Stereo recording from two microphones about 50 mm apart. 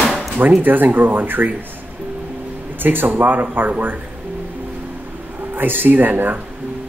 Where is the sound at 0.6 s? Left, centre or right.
Right.